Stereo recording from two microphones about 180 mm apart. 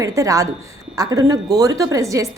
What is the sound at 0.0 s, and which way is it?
A woman's voice, 20° right (ahead or behind).